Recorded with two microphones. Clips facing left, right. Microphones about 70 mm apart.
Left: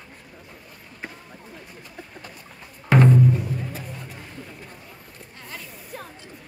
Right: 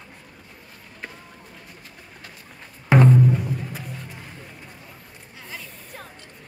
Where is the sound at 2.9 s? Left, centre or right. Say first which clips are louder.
Right 1 dB; centre.